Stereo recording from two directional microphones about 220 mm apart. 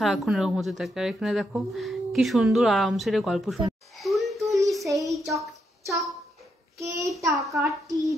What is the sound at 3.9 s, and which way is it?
Music, centre (ahead or behind).